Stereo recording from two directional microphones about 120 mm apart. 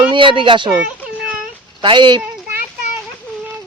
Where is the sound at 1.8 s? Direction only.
40° right (ahead or behind).